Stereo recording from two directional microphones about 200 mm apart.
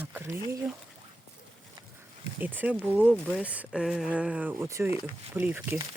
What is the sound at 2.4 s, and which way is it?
Speech, 10° right (ahead or behind).